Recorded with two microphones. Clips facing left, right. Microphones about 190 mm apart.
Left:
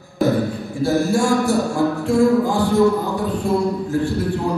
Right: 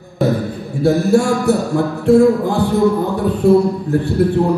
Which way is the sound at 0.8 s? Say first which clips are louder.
Right 4 dB; 60° right (ahead or behind).